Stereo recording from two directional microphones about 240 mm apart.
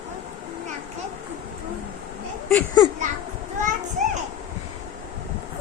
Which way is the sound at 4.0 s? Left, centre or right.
Right.